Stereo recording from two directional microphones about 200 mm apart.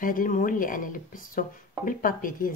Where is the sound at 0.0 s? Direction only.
45° left (ahead or behind).